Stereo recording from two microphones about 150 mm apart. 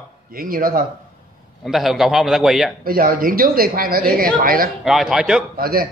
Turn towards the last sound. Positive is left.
turn(degrees=-75)  # may be behind; listen again after turning